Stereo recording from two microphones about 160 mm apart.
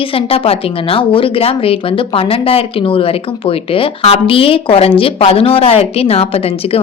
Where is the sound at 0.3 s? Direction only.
35° left (ahead or behind).